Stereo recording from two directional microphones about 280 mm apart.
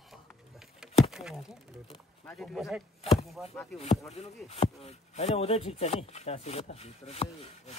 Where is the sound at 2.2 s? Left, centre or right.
Centre.